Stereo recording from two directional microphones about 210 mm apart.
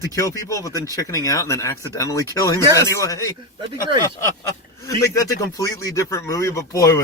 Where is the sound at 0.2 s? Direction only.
15° left (ahead or behind).